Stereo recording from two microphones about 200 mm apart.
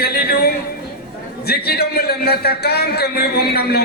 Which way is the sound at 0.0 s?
50° left (ahead or behind).